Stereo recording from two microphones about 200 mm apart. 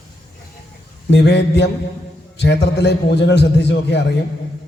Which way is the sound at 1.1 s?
60° left (ahead or behind).